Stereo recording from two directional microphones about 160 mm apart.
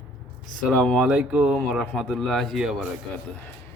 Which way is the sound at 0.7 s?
5° left (ahead or behind).